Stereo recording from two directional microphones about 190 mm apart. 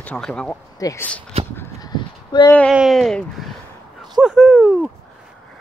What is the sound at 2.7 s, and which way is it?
Speech, centre (ahead or behind).